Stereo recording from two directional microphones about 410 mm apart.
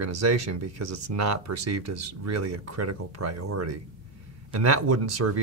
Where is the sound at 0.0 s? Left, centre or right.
Right.